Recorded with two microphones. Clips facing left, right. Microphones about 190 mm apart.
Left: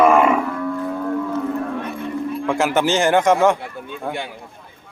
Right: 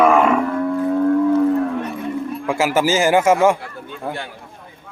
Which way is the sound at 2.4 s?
5° right (ahead or behind).